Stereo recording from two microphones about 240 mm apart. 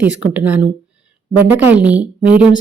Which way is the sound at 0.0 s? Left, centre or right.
Centre.